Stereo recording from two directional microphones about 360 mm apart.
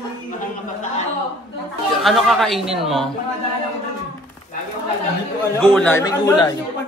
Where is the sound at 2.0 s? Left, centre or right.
Centre.